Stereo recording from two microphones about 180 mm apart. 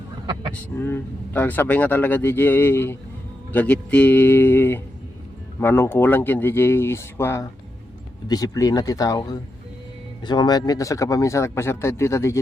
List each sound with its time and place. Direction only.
0.5 s speech: 10° left (ahead or behind)